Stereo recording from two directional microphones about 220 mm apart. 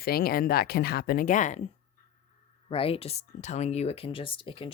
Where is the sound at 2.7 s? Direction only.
25° left (ahead or behind).